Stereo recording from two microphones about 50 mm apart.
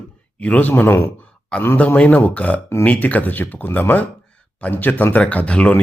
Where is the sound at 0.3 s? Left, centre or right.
Left.